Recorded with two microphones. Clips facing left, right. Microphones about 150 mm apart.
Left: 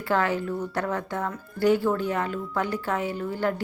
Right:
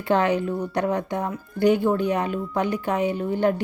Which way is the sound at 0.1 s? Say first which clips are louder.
Right 4 dB; 20° right (ahead or behind).